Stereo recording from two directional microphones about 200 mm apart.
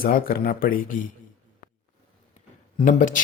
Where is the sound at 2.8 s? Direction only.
40° left (ahead or behind).